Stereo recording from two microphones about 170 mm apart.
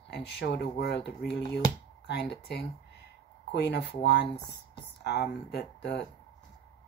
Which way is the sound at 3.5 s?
85° left.